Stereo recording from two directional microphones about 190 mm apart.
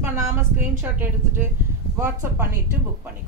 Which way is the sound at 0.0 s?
10° right (ahead or behind).